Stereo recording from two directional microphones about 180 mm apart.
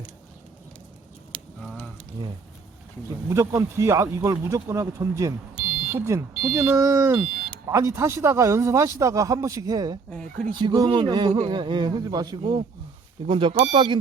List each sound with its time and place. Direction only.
1.6 s a sound: 5° left (ahead or behind)
3.2 s speech: 15° right (ahead or behind)
10.1 s speech: 5° left (ahead or behind)
10.5 s a man's voice: 25° right (ahead or behind)